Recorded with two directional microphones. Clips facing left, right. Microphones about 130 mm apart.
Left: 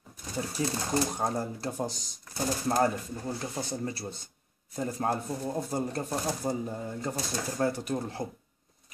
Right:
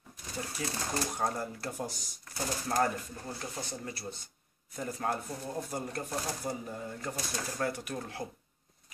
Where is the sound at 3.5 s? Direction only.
30° left (ahead or behind).